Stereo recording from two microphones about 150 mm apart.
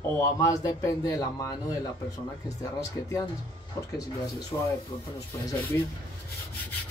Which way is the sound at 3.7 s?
25° left (ahead or behind).